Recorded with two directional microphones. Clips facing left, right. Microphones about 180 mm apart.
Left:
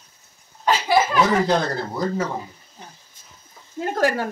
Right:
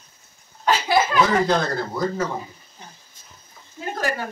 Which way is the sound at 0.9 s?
10° left (ahead or behind).